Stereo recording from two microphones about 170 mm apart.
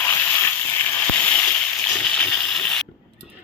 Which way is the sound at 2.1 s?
10° left (ahead or behind).